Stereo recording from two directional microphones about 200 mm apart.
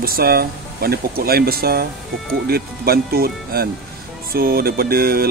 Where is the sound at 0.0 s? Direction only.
50° right (ahead or behind).